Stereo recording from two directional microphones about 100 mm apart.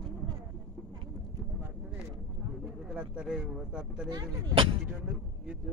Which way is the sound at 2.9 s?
10° right (ahead or behind).